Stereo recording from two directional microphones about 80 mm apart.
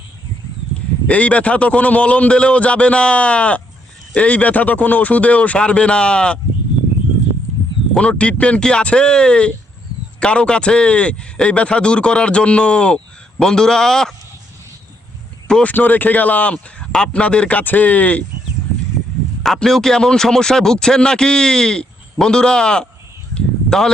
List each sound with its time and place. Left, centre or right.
1.0 s speech: centre
7.9 s speech: centre
15.6 s speech: left
19.4 s speech: centre
23.3 s a sound: centre